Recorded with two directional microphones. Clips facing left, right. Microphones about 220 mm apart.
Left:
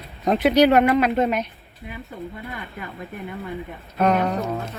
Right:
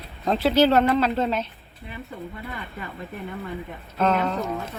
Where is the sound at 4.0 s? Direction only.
15° left (ahead or behind).